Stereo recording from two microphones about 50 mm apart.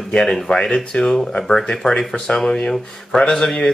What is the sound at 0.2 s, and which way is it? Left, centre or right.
Speech, centre.